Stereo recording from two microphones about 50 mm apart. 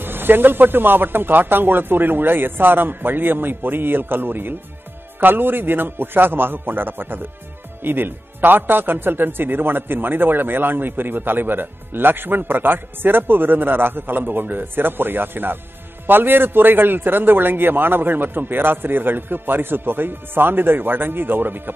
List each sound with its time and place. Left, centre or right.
0.0 s a man's voice: right